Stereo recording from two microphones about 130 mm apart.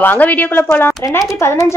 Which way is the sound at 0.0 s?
15° left (ahead or behind).